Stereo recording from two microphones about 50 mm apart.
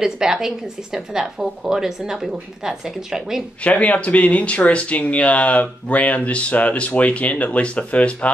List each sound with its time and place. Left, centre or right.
0.0 s a woman's voice: centre
3.6 s speech: left